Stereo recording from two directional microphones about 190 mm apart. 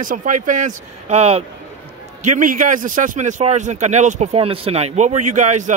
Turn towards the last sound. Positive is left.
turn(degrees=-40)  # may be behind; listen again after turning